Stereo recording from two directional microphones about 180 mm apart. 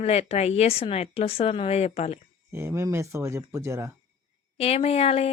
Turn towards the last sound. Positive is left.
turn(degrees=35)  # may be behind; listen again after turning